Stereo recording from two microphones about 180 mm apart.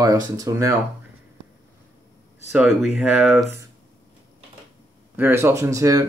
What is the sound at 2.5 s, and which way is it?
Speech, 5° right (ahead or behind).